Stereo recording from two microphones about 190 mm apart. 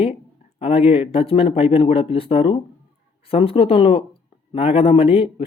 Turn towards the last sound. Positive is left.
turn(degrees=30)  # may be behind; listen again after turning